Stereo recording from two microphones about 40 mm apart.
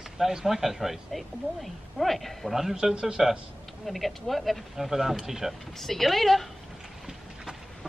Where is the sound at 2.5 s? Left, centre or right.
Centre.